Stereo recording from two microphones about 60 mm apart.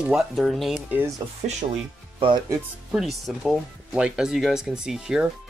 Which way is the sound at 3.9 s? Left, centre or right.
Centre.